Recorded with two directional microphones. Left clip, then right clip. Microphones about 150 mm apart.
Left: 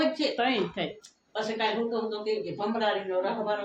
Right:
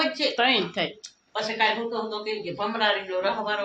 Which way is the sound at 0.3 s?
5° right (ahead or behind).